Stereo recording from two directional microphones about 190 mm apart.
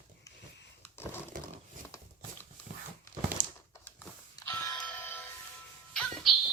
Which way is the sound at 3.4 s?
45° right (ahead or behind).